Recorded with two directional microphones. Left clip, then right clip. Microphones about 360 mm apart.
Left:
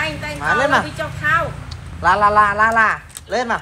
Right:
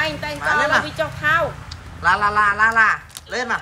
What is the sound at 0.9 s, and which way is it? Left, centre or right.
Vehicle, centre.